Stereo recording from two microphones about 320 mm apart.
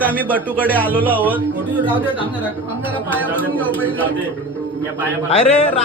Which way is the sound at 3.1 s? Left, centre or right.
Centre.